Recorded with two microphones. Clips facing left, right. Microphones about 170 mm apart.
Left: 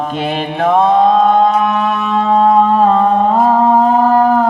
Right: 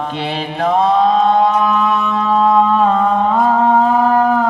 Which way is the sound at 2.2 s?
40° left (ahead or behind).